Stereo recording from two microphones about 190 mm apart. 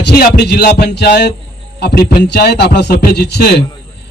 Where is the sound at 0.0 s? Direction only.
55° left (ahead or behind).